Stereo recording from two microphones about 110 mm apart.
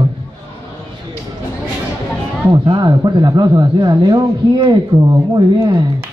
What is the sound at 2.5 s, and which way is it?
Speech, 40° right (ahead or behind).